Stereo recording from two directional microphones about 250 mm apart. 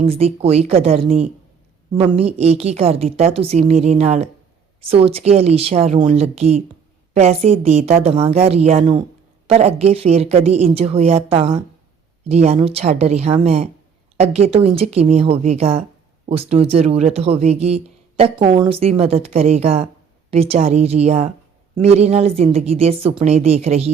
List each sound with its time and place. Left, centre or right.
0.1 s a woman's voice: right